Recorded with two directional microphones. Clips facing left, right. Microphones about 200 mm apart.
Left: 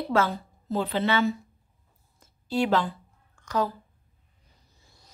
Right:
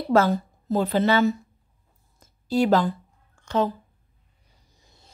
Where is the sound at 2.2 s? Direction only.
40° right (ahead or behind).